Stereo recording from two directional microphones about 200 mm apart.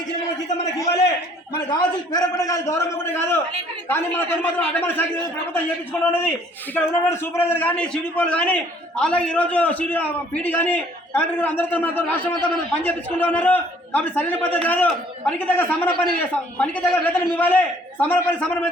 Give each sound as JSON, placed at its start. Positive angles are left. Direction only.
{"t": 0.4, "sound": "a man's voice", "side_deg": 35}
{"t": 1.7, "sound": "a man's voice", "side_deg": 20}